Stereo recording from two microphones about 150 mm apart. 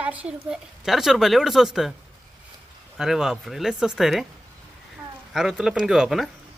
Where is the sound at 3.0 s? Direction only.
5° right (ahead or behind).